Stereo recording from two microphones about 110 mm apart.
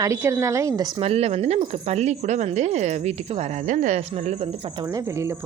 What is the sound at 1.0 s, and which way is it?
Speech, 65° right (ahead or behind).